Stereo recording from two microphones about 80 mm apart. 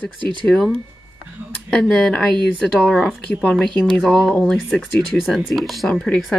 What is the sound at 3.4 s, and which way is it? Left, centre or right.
Speech, centre.